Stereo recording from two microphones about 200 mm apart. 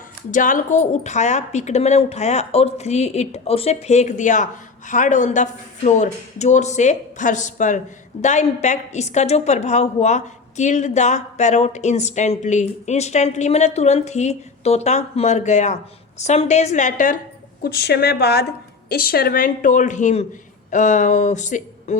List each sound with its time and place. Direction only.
0.3 s a woman's voice: 40° left (ahead or behind)
17.6 s a woman's voice: 50° left (ahead or behind)